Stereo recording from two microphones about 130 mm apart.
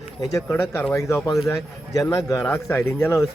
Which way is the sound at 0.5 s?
15° left (ahead or behind).